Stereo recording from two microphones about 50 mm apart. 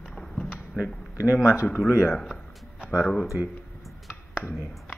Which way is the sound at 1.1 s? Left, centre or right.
Right.